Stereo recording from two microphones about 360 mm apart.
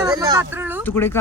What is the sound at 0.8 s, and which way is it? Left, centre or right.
Speech, centre.